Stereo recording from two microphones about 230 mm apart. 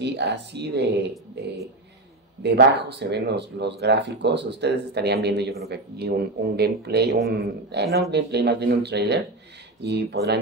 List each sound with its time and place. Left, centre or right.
0.0 s speech: right
2.4 s speech: right